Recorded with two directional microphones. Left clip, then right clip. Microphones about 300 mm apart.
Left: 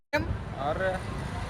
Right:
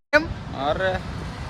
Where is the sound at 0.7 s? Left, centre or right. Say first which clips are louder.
Right 6 dB; right.